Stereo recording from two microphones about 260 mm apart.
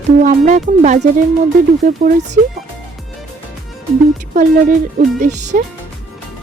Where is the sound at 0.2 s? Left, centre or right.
Right.